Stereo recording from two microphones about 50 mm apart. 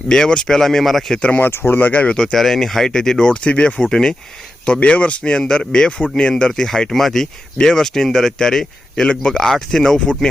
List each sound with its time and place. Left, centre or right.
0.1 s speech: centre
1.5 s speech: left
2.0 s speech: centre
2.3 s speech: centre